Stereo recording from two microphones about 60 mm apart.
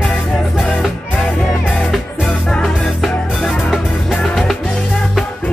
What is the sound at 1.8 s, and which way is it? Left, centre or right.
Music, centre.